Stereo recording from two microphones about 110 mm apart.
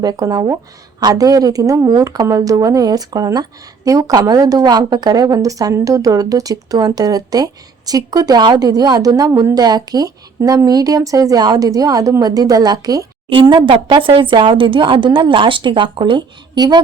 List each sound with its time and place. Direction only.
0.0 s a woman's voice: 35° right (ahead or behind)
13.3 s speech: 45° right (ahead or behind)